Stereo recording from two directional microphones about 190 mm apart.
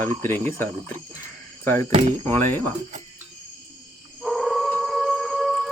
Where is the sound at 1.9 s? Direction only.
30° right (ahead or behind).